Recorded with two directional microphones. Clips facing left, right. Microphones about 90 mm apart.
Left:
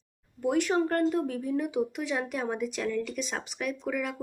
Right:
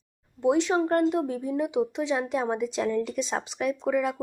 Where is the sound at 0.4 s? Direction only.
20° right (ahead or behind).